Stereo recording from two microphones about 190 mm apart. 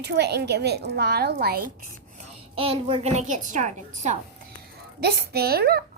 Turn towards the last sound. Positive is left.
turn(degrees=-55)  # may be behind; listen again after turning